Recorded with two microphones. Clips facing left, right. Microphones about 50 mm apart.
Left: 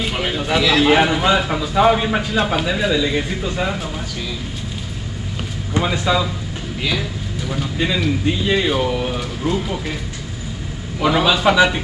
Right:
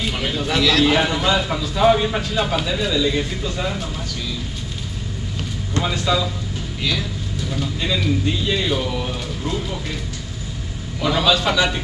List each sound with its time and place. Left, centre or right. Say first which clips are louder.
0.0 s speech: left 2 dB; centre
5.7 s speech: left 3 dB; centre
11.0 s speech: left 2 dB; centre